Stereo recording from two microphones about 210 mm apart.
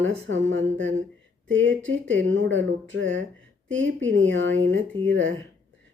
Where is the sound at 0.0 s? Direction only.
65° right (ahead or behind).